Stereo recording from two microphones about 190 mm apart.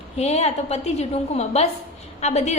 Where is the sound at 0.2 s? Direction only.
35° left (ahead or behind).